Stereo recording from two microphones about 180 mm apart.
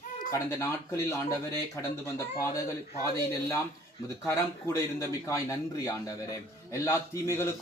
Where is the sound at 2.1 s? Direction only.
15° left (ahead or behind).